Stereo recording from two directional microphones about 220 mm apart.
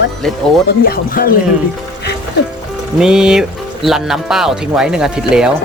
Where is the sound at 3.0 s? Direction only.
5° right (ahead or behind).